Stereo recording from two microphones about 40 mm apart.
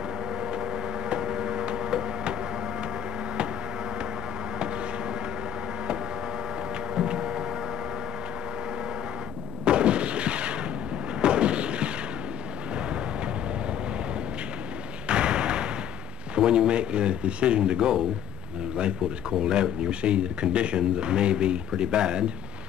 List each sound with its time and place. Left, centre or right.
1.1 s a sound: centre
1.8 s music: centre
7.2 s a sound: centre
9.7 s artillery fire: right
15.0 s thump: right
16.3 s speech: right
19.4 s speech: right